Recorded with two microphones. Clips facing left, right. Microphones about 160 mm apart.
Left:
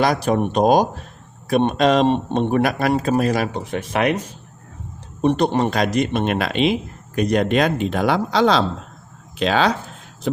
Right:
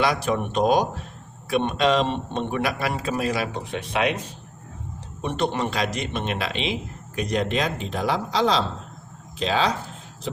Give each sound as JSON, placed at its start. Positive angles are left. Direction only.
{"t": 0.0, "sound": "speech", "side_deg": 40}
{"t": 5.2, "sound": "speech", "side_deg": 35}